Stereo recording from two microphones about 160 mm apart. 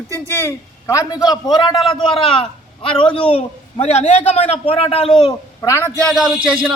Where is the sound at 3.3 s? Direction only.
40° left (ahead or behind).